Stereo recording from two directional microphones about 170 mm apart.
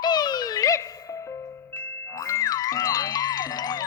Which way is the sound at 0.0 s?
25° left (ahead or behind).